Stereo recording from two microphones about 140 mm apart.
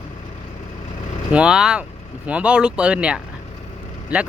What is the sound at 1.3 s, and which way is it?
Speech, 5° right (ahead or behind).